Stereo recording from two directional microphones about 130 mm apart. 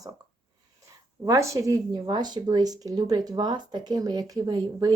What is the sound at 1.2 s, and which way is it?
Speech, 25° right (ahead or behind).